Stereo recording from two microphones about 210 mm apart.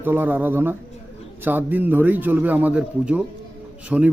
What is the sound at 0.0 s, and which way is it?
A man's voice, 10° right (ahead or behind).